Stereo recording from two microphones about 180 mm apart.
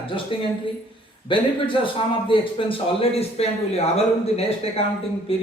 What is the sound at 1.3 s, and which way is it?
Speech, 30° left (ahead or behind).